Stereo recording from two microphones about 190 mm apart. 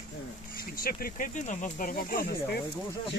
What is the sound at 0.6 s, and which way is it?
Speech, 50° left (ahead or behind).